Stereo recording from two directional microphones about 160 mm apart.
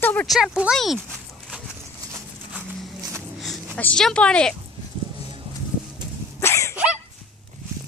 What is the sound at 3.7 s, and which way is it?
Speech, 5° left (ahead or behind).